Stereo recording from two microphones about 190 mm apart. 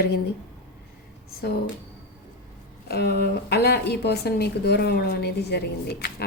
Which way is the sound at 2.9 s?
60° left (ahead or behind).